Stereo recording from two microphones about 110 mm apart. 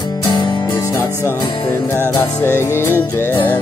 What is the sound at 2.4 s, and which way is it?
Music, 20° left (ahead or behind).